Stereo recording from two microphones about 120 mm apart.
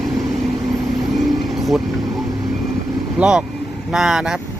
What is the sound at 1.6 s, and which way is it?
Vehicle, centre (ahead or behind).